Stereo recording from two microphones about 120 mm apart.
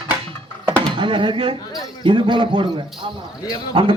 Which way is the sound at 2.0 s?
40° right (ahead or behind).